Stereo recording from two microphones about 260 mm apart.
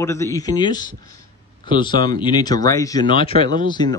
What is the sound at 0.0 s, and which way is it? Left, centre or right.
Speech, centre.